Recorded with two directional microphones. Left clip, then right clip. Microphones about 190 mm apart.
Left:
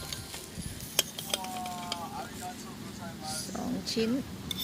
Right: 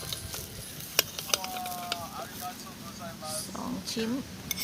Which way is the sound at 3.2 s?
Centre (ahead or behind).